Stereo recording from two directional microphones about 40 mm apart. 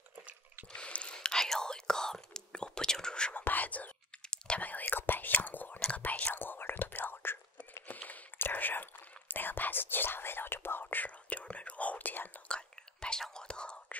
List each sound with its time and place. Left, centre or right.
0.7 s a sound: left
1.1 s whispering: centre
3.3 s whispering: left
6.3 s whispering: left
11.2 s whispering: left
12.4 s whispering: left